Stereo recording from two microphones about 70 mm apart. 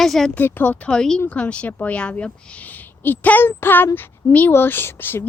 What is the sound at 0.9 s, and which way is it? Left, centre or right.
A woman's voice, centre.